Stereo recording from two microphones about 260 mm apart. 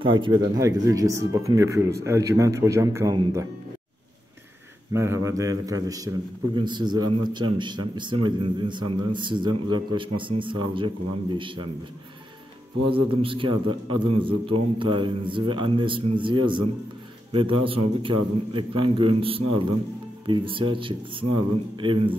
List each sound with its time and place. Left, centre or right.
0.0 s speech: centre
4.9 s a man's voice: centre
12.9 s a man's voice: right